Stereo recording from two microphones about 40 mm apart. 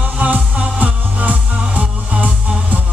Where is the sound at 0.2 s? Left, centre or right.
Right.